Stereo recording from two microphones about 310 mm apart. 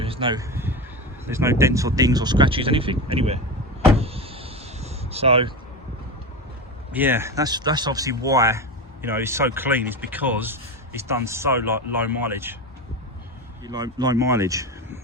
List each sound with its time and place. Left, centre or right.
0.0 s a sound: centre
1.3 s speech: centre
3.9 s door: centre
6.9 s speech: centre
13.7 s speech: centre